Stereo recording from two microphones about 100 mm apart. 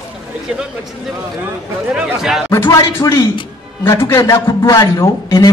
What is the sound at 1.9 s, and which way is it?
Speech, 5° right (ahead or behind).